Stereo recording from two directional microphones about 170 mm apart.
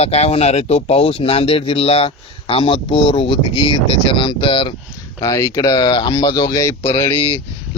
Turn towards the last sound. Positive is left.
turn(degrees=35)  # may be behind; listen again after turning